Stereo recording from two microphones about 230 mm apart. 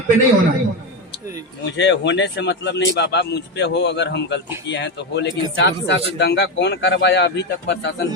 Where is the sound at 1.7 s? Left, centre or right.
Left.